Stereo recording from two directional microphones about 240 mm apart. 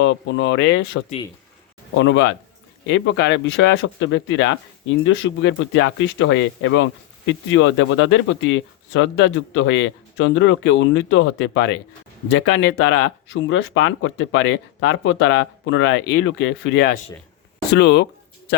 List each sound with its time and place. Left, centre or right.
0.0 s speech: left